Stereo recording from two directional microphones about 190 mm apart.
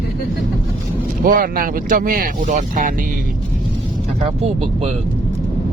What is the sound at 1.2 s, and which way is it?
Speech, 50° right (ahead or behind).